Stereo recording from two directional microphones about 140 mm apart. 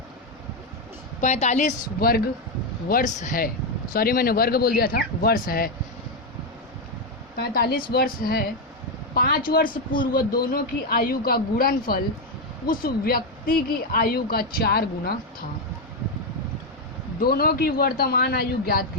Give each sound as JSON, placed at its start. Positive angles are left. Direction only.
{"t": 1.2, "sound": "a woman's voice", "side_deg": 55}
{"t": 3.2, "sound": "speech", "side_deg": 75}
{"t": 3.9, "sound": "speech", "side_deg": 90}
{"t": 7.3, "sound": "speech", "side_deg": 90}
{"t": 17.2, "sound": "speech", "side_deg": 90}